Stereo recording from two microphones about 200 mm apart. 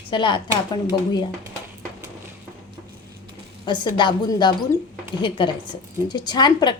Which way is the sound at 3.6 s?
25° left (ahead or behind).